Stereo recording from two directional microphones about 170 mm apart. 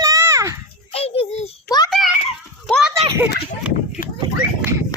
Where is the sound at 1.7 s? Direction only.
20° left (ahead or behind).